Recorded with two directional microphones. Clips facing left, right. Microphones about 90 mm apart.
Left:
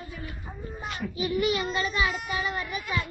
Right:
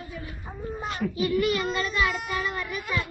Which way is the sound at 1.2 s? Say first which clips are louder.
Right 1 dB; 5° left (ahead or behind).